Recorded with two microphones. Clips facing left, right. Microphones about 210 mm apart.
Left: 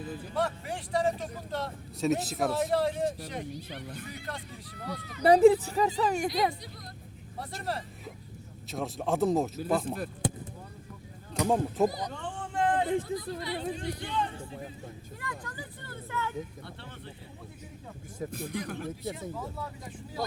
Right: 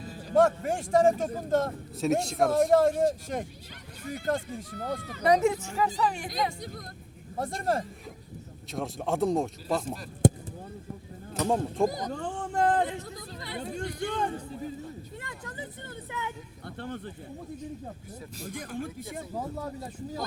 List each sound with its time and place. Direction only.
0.3 s speech: 45° right (ahead or behind)
2.0 s speech: centre (ahead or behind)
2.5 s speech: 45° right (ahead or behind)
5.2 s a woman's voice: 30° left (ahead or behind)
7.3 s speech: 45° right (ahead or behind)
8.7 s speech: centre (ahead or behind)
10.2 s fireworks: 45° right (ahead or behind)
11.4 s speech: centre (ahead or behind)
11.9 s a sound: 45° right (ahead or behind)
13.4 s hubbub: 50° right (ahead or behind)
15.2 s vehicle: 20° right (ahead or behind)
16.6 s speech: 50° right (ahead or behind)
18.2 s speech: 55° left (ahead or behind)
18.8 s speech: 45° right (ahead or behind)